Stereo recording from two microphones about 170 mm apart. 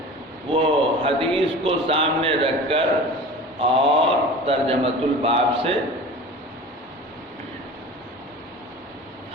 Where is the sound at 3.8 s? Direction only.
35° right (ahead or behind).